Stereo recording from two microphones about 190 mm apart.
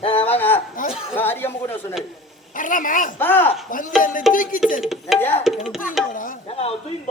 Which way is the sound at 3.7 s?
45° left (ahead or behind).